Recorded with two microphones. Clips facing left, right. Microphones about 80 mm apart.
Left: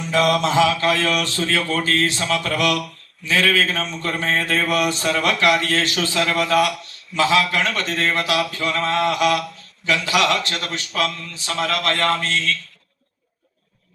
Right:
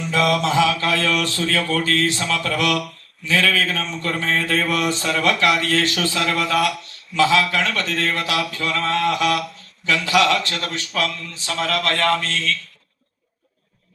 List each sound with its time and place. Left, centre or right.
0.0 s mantra: left